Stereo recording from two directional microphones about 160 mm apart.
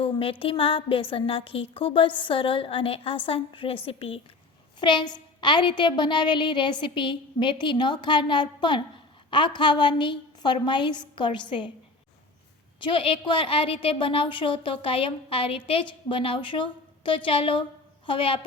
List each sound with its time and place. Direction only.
0.0 s a woman's voice: 35° left (ahead or behind)
12.8 s a woman's voice: 35° left (ahead or behind)